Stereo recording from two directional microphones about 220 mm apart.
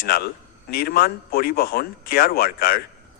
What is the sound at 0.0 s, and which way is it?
Speech, 45° left (ahead or behind).